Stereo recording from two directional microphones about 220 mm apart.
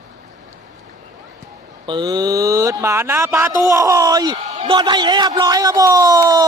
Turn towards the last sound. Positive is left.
turn(degrees=-15)  # may be behind; listen again after turning